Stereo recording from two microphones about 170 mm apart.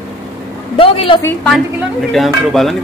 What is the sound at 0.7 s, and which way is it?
Speech, 30° left (ahead or behind).